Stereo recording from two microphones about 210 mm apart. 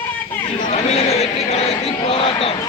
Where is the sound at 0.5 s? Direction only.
35° left (ahead or behind).